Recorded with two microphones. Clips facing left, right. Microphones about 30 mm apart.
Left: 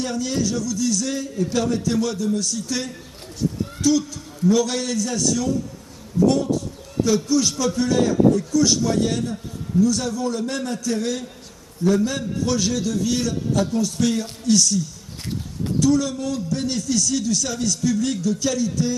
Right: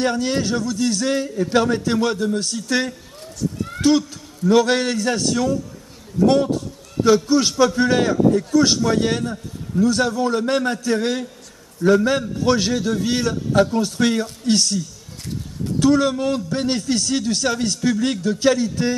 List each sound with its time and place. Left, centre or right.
0.0 s a man's voice: right
15.8 s a man's voice: right